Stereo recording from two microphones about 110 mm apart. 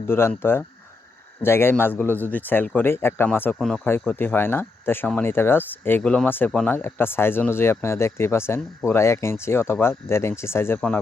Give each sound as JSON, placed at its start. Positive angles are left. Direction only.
{"t": 0.1, "sound": "speech", "side_deg": 20}
{"t": 3.5, "sound": "speech", "side_deg": 5}
{"t": 6.0, "sound": "speech", "side_deg": 5}
{"t": 6.2, "sound": "speech", "side_deg": 15}